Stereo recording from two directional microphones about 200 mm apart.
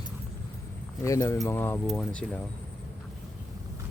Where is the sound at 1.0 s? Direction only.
15° left (ahead or behind).